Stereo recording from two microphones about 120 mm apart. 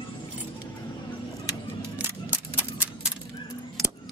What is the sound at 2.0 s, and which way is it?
Single-lens reflex camera, 15° right (ahead or behind).